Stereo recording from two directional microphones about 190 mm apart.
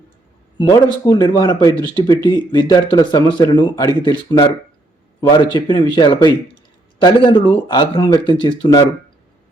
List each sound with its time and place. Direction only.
0.6 s speech: 20° left (ahead or behind)
5.5 s speech: 25° left (ahead or behind)